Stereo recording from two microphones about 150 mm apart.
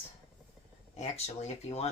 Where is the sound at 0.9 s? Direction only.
45° left (ahead or behind).